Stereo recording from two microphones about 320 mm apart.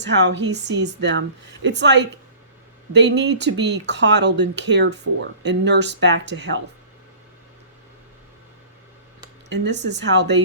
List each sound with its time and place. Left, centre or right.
0.0 s speech: right
9.5 s speech: right